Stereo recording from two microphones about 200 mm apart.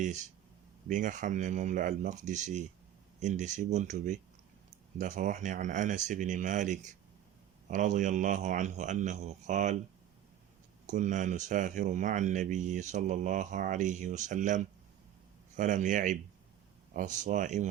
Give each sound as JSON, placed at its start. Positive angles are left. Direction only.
{"t": 0.9, "sound": "speech", "side_deg": -40}
{"t": 10.8, "sound": "speech", "side_deg": -40}